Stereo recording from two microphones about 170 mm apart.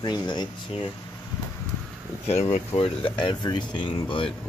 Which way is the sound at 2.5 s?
30° left (ahead or behind).